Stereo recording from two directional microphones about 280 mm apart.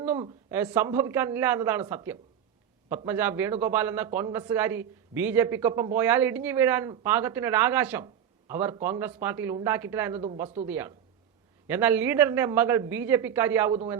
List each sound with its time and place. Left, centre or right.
0.0 s a man's voice: centre